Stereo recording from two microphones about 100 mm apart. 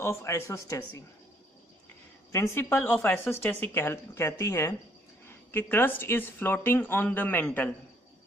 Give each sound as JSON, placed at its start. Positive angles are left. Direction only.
{"t": 0.0, "sound": "speech", "side_deg": 30}
{"t": 2.3, "sound": "speech", "side_deg": 30}
{"t": 2.6, "sound": "speech", "side_deg": 20}